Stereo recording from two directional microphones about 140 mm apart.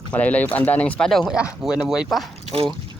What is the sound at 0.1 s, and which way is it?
Speech, 10° left (ahead or behind).